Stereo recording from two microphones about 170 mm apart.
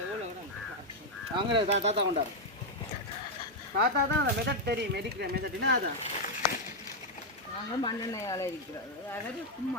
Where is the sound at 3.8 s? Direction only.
75° right (ahead or behind).